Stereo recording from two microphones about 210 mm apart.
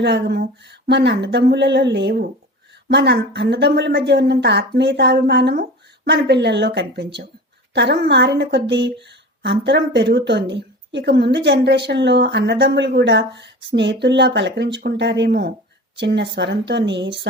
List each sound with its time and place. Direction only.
0.0 s a woman's voice: 55° right (ahead or behind)